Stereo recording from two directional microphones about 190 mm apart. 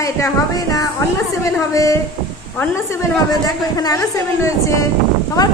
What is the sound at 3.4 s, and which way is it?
A woman's voice, 20° left (ahead or behind).